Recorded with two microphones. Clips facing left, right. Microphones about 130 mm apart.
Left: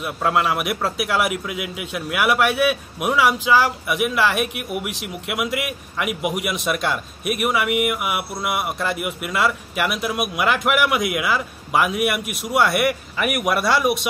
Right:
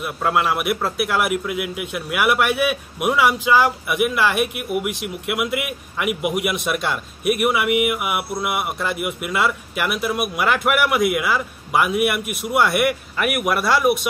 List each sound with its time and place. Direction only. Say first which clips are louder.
0.0 s speech: even; 5° right (ahead or behind)